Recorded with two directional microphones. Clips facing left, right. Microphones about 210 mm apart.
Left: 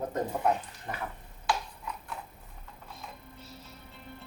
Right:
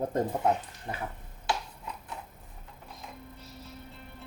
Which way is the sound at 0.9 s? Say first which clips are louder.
Right 1 dB; 25° right (ahead or behind).